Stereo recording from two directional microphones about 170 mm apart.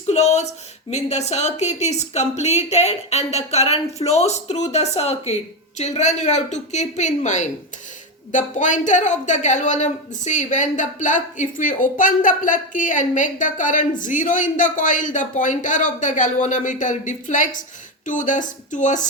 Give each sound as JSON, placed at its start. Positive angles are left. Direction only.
{"t": 0.1, "sound": "a woman's voice", "side_deg": 40}